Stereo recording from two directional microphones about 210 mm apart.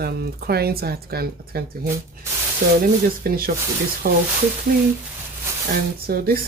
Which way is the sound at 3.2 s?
45° right (ahead or behind).